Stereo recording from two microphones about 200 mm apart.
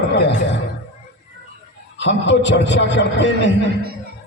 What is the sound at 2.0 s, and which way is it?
A man's voice, 65° left (ahead or behind).